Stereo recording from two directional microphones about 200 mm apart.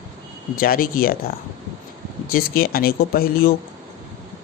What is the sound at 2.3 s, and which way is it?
Speech, 50° left (ahead or behind).